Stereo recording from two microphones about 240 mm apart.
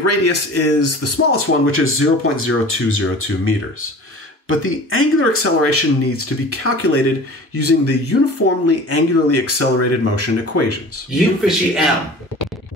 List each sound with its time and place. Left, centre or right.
0.0 s speech: left
11.4 s speech: centre